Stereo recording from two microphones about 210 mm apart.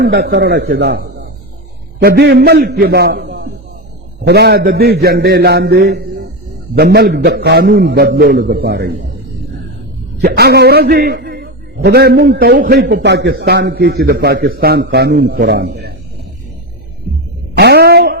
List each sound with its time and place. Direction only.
0.0 s a man's voice: 50° right (ahead or behind)
10.2 s a man's voice: 45° right (ahead or behind)
17.6 s a sound: 50° right (ahead or behind)